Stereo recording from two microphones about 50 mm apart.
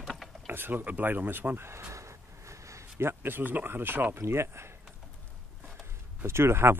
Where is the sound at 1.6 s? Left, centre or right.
Right.